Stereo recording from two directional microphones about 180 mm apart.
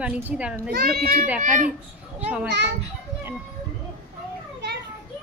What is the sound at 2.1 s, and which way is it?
Speech, 10° right (ahead or behind).